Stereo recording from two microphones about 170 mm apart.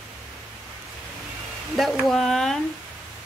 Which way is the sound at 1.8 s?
Centre (ahead or behind).